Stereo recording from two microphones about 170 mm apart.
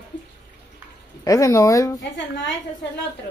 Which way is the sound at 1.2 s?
20° left (ahead or behind).